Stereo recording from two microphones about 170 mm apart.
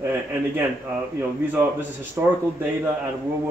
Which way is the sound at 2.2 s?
10° right (ahead or behind).